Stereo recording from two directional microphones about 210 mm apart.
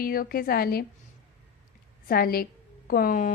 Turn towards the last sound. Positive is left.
turn(degrees=40)  # may be behind; listen again after turning